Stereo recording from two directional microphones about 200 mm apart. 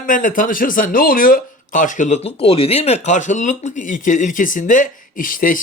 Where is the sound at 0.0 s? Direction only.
45° left (ahead or behind).